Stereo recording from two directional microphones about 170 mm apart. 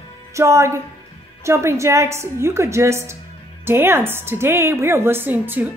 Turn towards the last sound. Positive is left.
turn(degrees=-10)  # may be behind; listen again after turning